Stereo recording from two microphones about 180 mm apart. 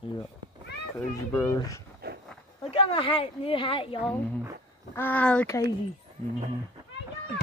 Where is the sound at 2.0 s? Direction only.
60° right (ahead or behind).